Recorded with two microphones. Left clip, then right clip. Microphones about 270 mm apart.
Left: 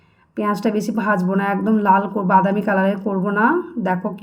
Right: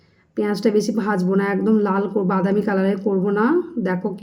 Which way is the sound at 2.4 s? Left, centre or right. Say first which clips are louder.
Left 2 dB; left.